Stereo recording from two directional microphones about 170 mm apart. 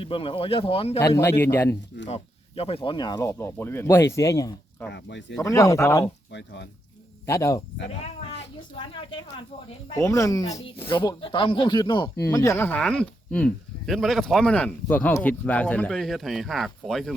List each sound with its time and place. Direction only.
0.0 s speech: 30° left (ahead or behind)
0.9 s speech: 15° left (ahead or behind)
2.0 s speech: 35° left (ahead or behind); by 4.9 s 20° left (ahead or behind)
4.9 s speech: 90° left
5.4 s speech: 20° left (ahead or behind)
6.3 s speech: 90° left
7.3 s speech: 20° left (ahead or behind)
8.3 s speech: 30° left (ahead or behind)
10.0 s speech: 20° left (ahead or behind); by 17.2 s centre (ahead or behind)